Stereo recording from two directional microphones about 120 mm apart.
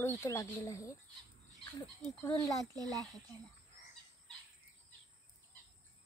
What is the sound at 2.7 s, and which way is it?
Speech, 30° right (ahead or behind).